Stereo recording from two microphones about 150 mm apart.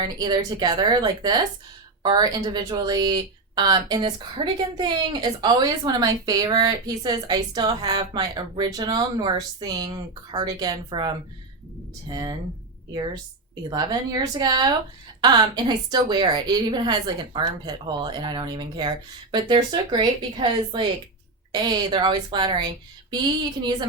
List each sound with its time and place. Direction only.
0.0 s speech: 30° right (ahead or behind)
13.7 s speech: 30° right (ahead or behind)